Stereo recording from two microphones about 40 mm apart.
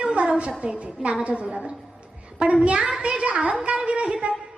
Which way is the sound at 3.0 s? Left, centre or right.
Right.